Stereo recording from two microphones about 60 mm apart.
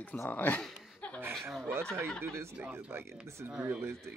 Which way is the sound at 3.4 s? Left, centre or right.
Right.